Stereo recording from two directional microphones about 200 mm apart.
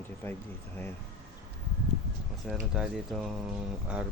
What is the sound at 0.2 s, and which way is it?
Speech, 10° left (ahead or behind).